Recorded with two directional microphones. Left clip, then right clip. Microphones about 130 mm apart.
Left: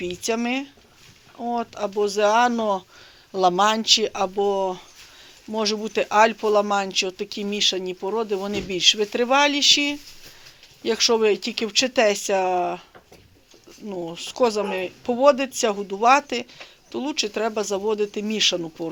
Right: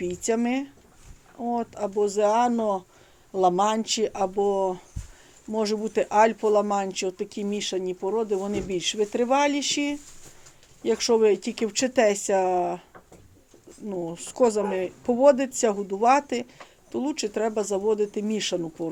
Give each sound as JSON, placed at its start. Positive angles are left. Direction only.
{"t": 0.0, "sound": "speech", "side_deg": -25}
{"t": 13.8, "sound": "speech", "side_deg": -20}
{"t": 14.3, "sound": "a woman's voice", "side_deg": -30}